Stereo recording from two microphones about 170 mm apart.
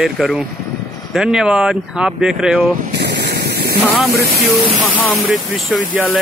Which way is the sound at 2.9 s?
75° right (ahead or behind).